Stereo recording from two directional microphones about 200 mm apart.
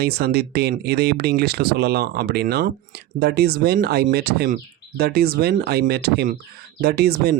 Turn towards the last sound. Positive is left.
turn(degrees=-50)  # may be behind; listen again after turning